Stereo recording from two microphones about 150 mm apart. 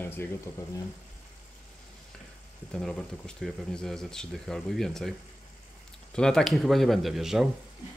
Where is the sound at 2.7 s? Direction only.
5° left (ahead or behind).